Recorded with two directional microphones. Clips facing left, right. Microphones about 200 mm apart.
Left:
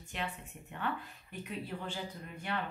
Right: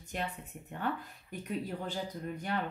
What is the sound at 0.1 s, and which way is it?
Speech, 40° right (ahead or behind).